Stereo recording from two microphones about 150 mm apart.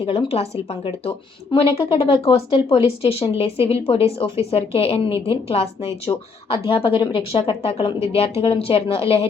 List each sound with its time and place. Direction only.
0.0 s speech: 40° left (ahead or behind)